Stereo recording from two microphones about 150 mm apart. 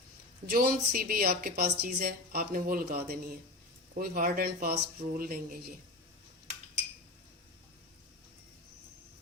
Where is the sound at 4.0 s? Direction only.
75° right (ahead or behind).